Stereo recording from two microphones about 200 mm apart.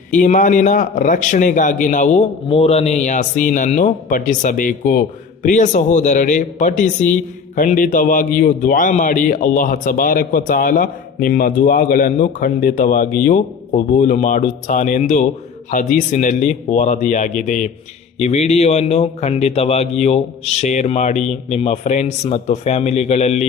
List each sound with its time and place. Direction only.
0.1 s a man's voice: 40° left (ahead or behind)